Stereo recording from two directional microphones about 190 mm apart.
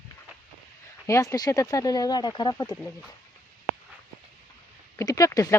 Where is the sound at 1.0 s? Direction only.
15° left (ahead or behind).